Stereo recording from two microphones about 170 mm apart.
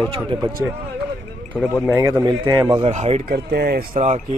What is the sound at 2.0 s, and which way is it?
Speech, 15° right (ahead or behind).